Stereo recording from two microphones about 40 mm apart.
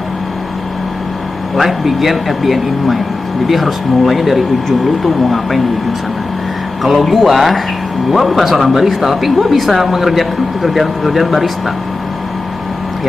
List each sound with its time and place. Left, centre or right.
1.6 s speech: centre
6.8 s speech: centre